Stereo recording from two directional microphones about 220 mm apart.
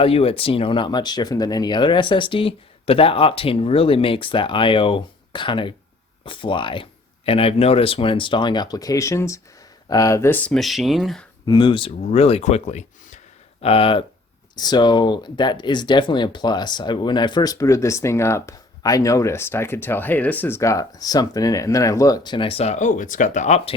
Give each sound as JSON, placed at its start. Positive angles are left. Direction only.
{"t": 0.0, "sound": "speech", "side_deg": 25}
{"t": 11.4, "sound": "speech", "side_deg": 20}